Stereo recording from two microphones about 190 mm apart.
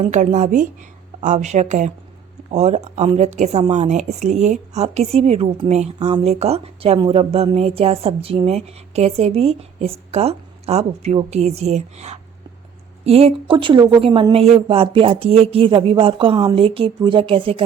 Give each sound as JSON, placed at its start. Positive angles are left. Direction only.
{"t": 0.0, "sound": "a woman's voice", "side_deg": -40}